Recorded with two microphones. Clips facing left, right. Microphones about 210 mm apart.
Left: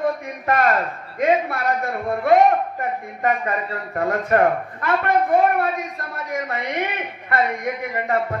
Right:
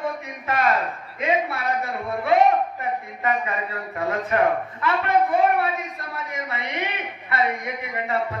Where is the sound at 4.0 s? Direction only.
50° left (ahead or behind).